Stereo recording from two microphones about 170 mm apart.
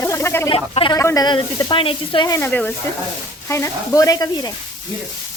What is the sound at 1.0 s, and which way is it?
Speech, 20° left (ahead or behind).